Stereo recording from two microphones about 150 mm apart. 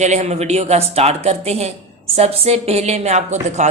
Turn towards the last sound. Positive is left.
turn(degrees=-50)  # may be behind; listen again after turning